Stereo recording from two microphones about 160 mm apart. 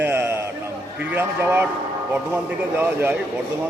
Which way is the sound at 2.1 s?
15° right (ahead or behind).